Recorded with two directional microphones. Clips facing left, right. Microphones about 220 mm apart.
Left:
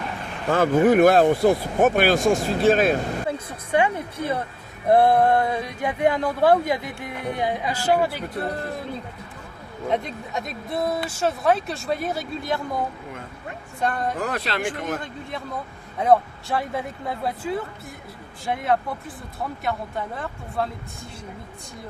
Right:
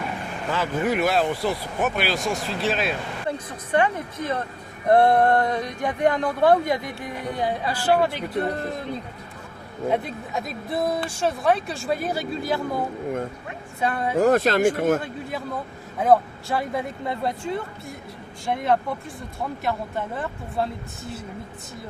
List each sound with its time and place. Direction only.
0.5 s speech: 50° left (ahead or behind)
3.2 s speech: 10° left (ahead or behind)
9.9 s speech: 5° right (ahead or behind)
14.2 s speech: 45° right (ahead or behind)
15.0 s speech: 5° right (ahead or behind)